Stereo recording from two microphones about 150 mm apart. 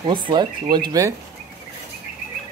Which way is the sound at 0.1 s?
30° right (ahead or behind).